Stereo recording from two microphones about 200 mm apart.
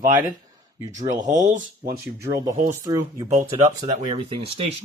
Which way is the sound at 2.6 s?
15° right (ahead or behind).